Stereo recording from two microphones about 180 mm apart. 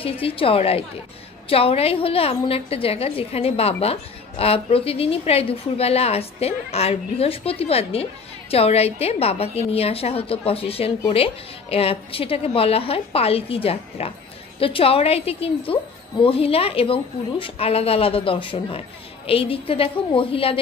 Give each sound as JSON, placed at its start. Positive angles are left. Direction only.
{"t": 0.0, "sound": "a woman's voice", "side_deg": 30}